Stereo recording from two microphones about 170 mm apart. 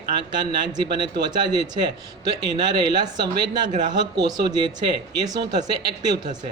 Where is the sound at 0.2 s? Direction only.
25° right (ahead or behind).